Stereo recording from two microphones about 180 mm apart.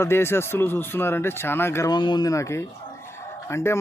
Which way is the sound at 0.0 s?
15° left (ahead or behind).